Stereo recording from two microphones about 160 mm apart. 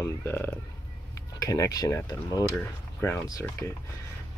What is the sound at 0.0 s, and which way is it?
Speech, 15° left (ahead or behind).